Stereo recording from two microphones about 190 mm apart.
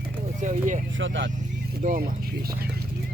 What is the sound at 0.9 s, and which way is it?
Speech, 80° right.